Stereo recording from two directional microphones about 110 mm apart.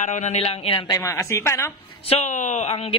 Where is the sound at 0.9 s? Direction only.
30° left (ahead or behind).